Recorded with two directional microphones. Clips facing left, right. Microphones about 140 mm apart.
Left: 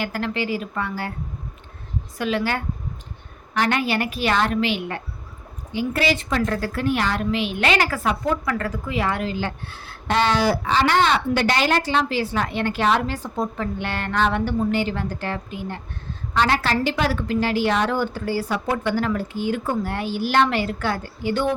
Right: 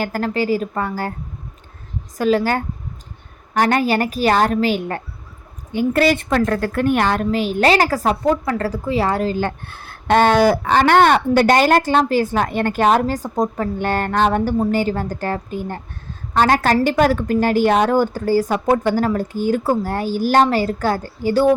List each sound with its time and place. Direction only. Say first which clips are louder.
0.0 s a woman's voice: right 5 dB; 40° right (ahead or behind)
2.1 s a woman's voice: right 7 dB; 40° right (ahead or behind)